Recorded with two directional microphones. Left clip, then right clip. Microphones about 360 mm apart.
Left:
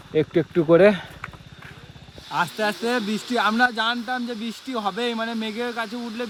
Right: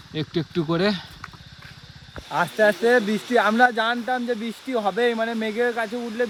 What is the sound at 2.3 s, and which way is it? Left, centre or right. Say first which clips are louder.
Speech: right 4 dB; centre.